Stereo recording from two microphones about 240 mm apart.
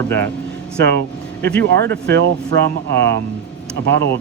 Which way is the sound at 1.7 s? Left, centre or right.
Right.